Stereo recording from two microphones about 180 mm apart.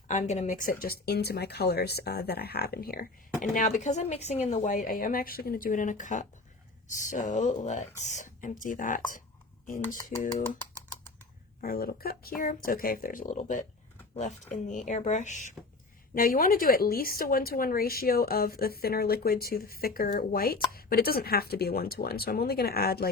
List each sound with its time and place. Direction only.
0.1 s speech: 40° left (ahead or behind)
10.1 s speech: 50° left (ahead or behind)
11.6 s speech: 55° left (ahead or behind)